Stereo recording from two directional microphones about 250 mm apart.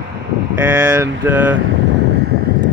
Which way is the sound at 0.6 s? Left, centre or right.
Centre.